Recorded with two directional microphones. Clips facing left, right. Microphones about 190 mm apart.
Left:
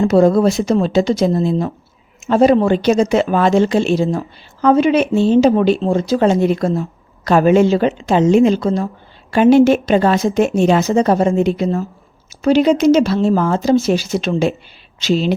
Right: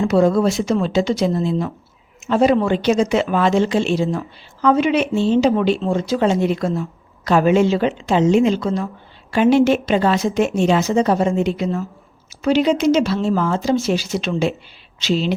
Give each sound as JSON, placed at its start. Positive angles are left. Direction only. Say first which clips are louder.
{"t": 0.0, "sound": "speech", "louder": "left 4 dB", "side_deg": 40}